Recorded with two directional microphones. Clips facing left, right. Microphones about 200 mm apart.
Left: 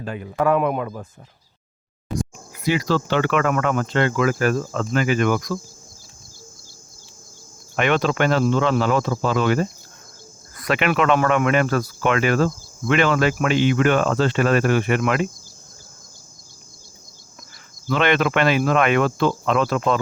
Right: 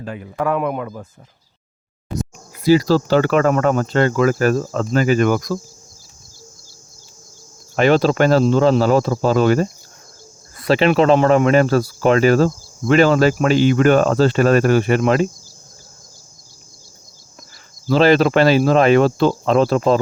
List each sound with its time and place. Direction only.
2.6 s speech: 35° right (ahead or behind)
7.8 s speech: 35° right (ahead or behind)
17.8 s speech: 35° right (ahead or behind)